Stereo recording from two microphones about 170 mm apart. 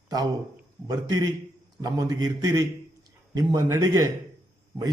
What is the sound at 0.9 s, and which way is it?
A man's voice, 20° right (ahead or behind).